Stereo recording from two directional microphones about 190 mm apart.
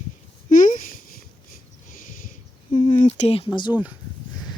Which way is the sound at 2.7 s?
40° left (ahead or behind).